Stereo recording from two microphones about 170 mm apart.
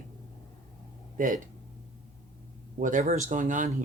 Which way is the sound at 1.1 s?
50° right (ahead or behind).